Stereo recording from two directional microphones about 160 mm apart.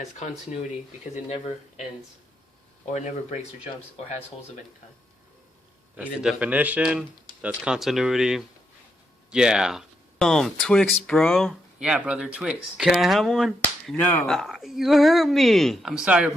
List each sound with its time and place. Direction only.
1.1 s speech: 45° left (ahead or behind)
2.8 s speech: 45° left (ahead or behind)
6.0 s speech: 5° right (ahead or behind)
13.9 s speech: 10° left (ahead or behind); by 16.3 s 5° right (ahead or behind)